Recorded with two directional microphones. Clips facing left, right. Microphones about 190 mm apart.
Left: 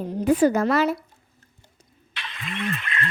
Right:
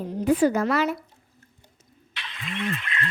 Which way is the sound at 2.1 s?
50° left (ahead or behind).